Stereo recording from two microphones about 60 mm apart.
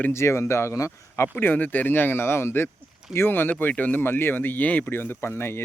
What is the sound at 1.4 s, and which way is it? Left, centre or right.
Speech, left.